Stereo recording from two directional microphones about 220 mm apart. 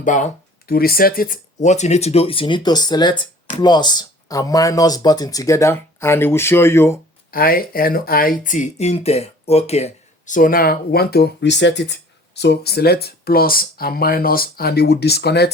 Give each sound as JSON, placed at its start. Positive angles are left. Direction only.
{"t": 0.0, "sound": "speech", "side_deg": 35}
{"t": 7.3, "sound": "speech", "side_deg": 40}